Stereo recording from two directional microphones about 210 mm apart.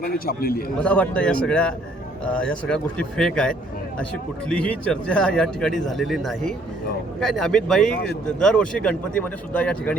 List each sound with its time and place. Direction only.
0.0 s a man's voice: 45° left (ahead or behind)
0.8 s speech: 5° left (ahead or behind)